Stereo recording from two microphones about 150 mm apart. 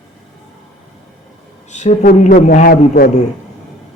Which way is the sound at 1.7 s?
55° left (ahead or behind).